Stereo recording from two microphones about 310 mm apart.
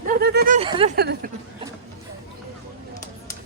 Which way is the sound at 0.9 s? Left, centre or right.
Right.